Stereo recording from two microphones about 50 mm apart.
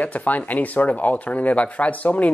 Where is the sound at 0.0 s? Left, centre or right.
Left.